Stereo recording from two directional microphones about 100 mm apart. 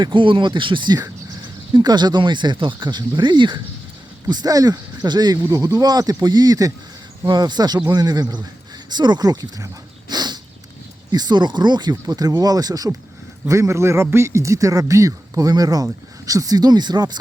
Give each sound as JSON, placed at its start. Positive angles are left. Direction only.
{"t": 0.0, "sound": "speech", "side_deg": -55}
{"t": 10.1, "sound": "a sound", "side_deg": -45}
{"t": 11.1, "sound": "speech", "side_deg": -45}